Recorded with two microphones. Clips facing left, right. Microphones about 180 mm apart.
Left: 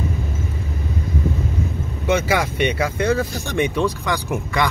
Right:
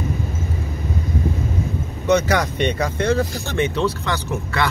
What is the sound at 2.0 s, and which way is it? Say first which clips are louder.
Speech: right 2 dB; 10° left (ahead or behind).